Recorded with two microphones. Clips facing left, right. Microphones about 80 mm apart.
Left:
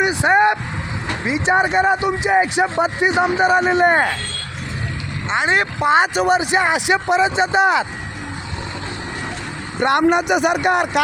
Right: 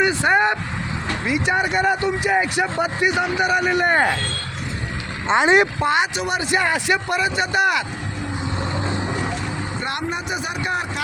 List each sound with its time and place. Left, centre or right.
0.0 s vehicle: centre
1.0 s speech: left
5.3 s speech: right
5.9 s speech: left
6.4 s speech: left
9.8 s speech: left